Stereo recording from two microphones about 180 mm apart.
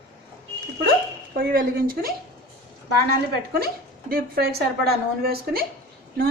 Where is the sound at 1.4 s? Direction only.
55° right (ahead or behind).